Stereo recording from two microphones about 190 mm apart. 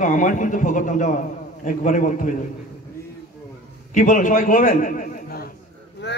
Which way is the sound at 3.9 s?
45° left (ahead or behind).